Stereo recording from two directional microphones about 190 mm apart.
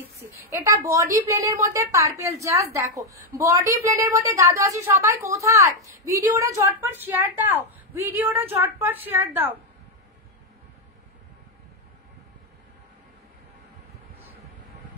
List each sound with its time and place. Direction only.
0.5 s a woman's voice: 15° right (ahead or behind)